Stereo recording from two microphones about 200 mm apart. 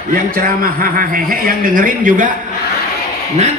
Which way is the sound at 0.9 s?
45° right (ahead or behind).